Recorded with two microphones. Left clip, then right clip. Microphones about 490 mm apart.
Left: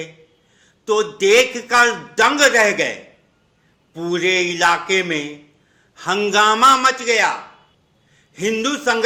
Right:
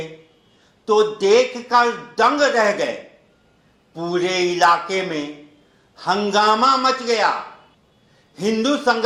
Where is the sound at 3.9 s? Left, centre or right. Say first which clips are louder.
Left 3 dB; left.